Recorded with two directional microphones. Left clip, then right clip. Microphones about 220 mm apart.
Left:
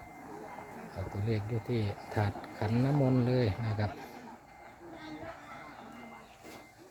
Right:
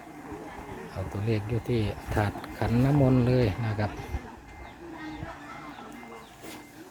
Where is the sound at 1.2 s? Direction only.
10° right (ahead or behind).